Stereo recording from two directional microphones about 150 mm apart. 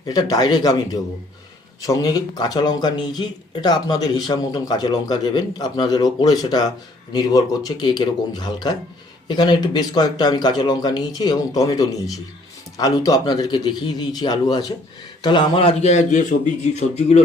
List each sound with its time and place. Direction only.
0.0 s a man's voice: 25° left (ahead or behind); by 17.2 s 45° left (ahead or behind)